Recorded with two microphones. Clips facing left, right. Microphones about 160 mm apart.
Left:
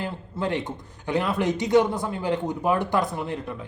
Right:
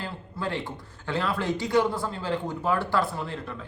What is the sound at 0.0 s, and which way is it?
A man's voice, 20° left (ahead or behind).